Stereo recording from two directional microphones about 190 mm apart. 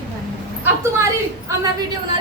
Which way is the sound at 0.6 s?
15° right (ahead or behind).